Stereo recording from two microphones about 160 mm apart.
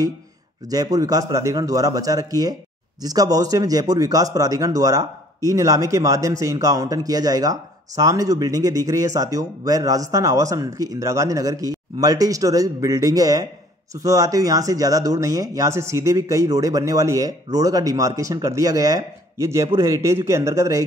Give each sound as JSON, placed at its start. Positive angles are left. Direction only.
{"t": 0.7, "sound": "speech", "side_deg": -20}